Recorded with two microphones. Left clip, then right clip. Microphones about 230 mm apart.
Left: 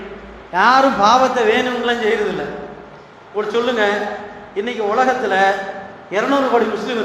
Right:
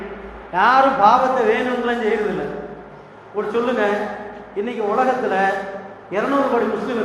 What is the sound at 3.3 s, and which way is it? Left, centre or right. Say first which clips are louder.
A man's voice: left 2 dB; left.